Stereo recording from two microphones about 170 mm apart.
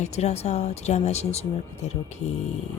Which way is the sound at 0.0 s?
40° left (ahead or behind).